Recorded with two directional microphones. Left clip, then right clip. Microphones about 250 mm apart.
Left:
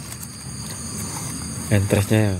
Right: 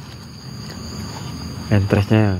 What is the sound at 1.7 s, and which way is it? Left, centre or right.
Speech, centre.